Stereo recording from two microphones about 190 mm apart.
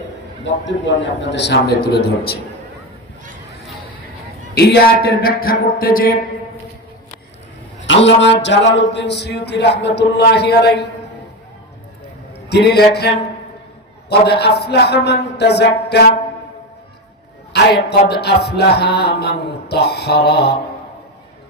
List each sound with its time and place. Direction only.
0.4 s music: 75° left (ahead or behind); by 2.4 s 55° left (ahead or behind)
4.5 s speech: 55° left (ahead or behind)
8.0 s speech: 70° left (ahead or behind)
9.8 s music: 65° left (ahead or behind)
12.5 s music: 60° left (ahead or behind)
17.5 s music: 60° left (ahead or behind)